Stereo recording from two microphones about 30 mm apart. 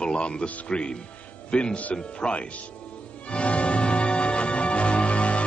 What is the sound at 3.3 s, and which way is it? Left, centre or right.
Music, left.